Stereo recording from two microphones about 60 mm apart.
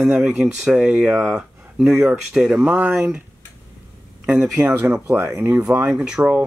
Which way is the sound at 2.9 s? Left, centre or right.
Centre.